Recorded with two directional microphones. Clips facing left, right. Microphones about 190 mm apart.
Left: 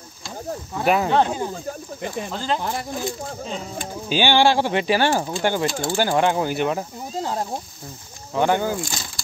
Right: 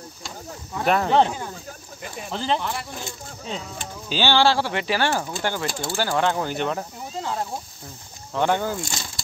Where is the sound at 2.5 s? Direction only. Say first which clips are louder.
Left 2 dB; 40° left (ahead or behind).